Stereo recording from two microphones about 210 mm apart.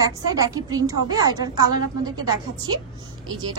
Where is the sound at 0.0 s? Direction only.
15° right (ahead or behind).